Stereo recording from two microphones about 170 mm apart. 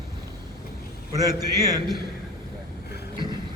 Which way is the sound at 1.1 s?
20° right (ahead or behind).